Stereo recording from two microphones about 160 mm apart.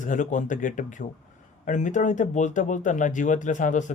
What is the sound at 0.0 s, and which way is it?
Speech, 50° left (ahead or behind).